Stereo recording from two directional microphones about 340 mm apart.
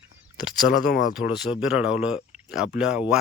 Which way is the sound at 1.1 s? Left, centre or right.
Centre.